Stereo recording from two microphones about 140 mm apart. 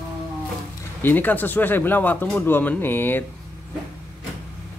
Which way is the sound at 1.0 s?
15° left (ahead or behind).